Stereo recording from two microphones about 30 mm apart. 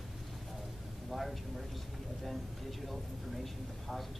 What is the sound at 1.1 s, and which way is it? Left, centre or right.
Speech, centre.